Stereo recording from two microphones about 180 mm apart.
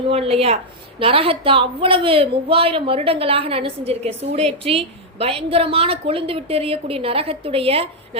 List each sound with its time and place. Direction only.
0.1 s a woman's voice: 35° right (ahead or behind)